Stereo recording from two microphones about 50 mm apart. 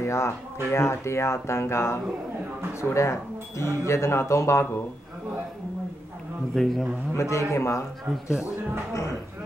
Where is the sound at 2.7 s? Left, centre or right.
Left.